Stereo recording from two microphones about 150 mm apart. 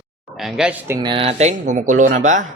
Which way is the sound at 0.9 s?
30° right (ahead or behind).